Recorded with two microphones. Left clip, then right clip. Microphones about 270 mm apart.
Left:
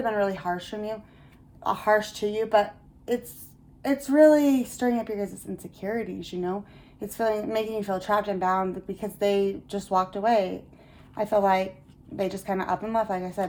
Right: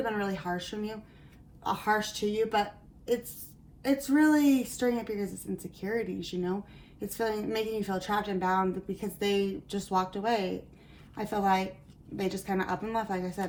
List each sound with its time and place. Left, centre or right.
0.0 s a woman's voice: left
3.8 s a woman's voice: left